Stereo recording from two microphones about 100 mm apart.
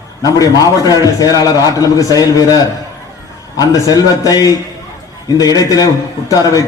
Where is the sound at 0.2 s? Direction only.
35° left (ahead or behind).